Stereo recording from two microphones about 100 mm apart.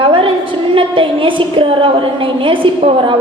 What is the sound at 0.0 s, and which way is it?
A woman's voice, 60° right (ahead or behind).